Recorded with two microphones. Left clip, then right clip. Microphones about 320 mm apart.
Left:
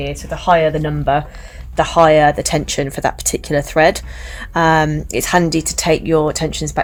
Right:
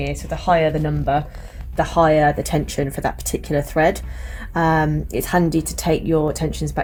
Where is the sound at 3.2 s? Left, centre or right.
Left.